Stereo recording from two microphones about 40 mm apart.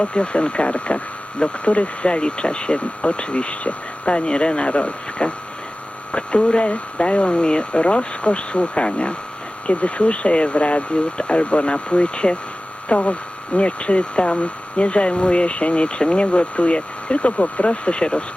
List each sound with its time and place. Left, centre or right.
0.0 s speech: left